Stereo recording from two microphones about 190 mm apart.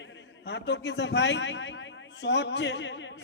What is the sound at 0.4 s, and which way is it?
A man's voice, 65° left (ahead or behind).